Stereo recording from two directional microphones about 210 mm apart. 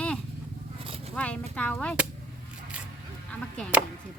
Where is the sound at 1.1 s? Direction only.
5° left (ahead or behind).